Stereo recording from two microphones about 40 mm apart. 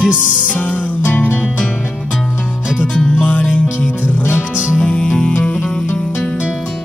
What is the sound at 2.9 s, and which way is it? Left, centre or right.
Music, left.